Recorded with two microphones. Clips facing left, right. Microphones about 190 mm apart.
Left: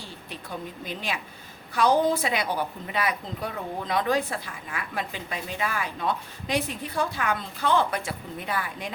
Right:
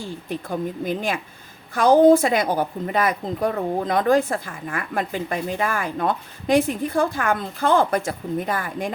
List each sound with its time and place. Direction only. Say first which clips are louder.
0.0 s a woman's voice: right 10 dB; 50° right (ahead or behind)